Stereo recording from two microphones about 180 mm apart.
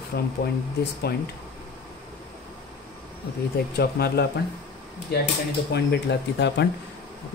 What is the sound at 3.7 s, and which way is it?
Speech, 60° left (ahead or behind).